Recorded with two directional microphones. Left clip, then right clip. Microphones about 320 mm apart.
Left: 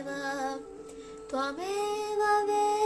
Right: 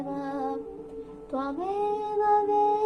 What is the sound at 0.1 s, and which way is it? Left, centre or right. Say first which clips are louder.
Music: even; left.